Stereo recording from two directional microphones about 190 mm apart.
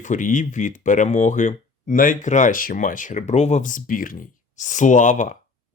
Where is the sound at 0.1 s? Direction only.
40° left (ahead or behind).